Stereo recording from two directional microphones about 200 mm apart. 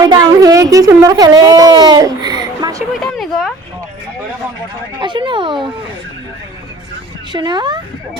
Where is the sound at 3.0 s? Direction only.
Centre (ahead or behind).